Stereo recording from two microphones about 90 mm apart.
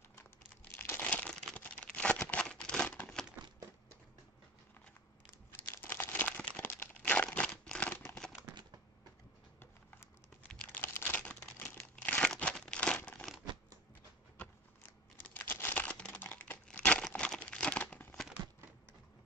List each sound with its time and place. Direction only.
0.7 s crumpling: 20° left (ahead or behind)
5.5 s crumpling: 25° left (ahead or behind)
10.5 s crumpling: 15° left (ahead or behind)
15.1 s crumpling: 25° left (ahead or behind)